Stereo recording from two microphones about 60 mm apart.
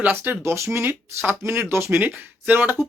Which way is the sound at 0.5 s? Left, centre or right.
Right.